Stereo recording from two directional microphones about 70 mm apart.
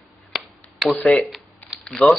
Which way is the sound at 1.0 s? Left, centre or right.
Centre.